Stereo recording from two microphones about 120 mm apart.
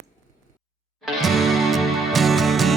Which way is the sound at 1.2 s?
Centre (ahead or behind).